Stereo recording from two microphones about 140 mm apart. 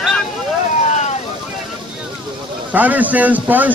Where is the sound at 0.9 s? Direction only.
55° left (ahead or behind).